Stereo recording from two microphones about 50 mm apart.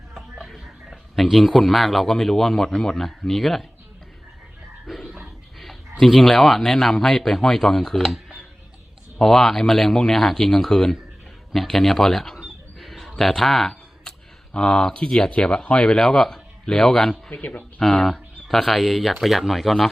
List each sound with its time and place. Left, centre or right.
0.1 s speech: centre
4.9 s a sound: centre
6.0 s speech: centre
8.0 s music: centre
9.1 s a man's voice: centre
12.8 s a sound: centre
14.5 s a man's voice: centre
17.3 s speech: left
18.0 s speech: centre